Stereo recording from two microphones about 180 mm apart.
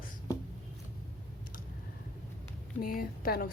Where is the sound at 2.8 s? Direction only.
55° left (ahead or behind).